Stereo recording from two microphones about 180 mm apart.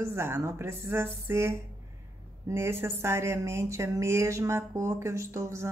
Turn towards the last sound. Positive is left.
turn(degrees=-15)  # may be behind; listen again after turning